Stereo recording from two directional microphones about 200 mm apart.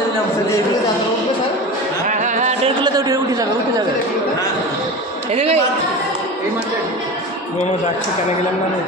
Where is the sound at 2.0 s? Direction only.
40° right (ahead or behind).